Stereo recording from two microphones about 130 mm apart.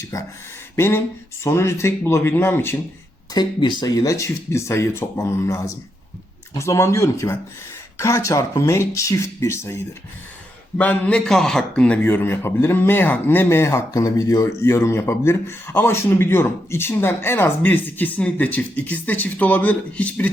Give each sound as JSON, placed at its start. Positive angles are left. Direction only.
{"t": 0.0, "sound": "a man's voice", "side_deg": 25}
{"t": 3.3, "sound": "speech", "side_deg": 35}
{"t": 10.8, "sound": "a man's voice", "side_deg": 10}